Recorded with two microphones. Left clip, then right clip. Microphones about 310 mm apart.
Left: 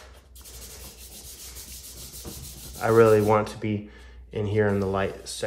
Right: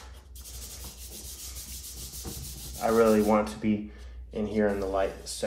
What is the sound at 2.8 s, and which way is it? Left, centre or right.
Speech, left.